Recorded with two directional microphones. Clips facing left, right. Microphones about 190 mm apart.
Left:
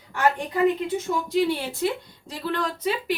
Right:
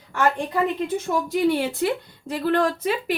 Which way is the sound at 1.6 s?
55° right (ahead or behind).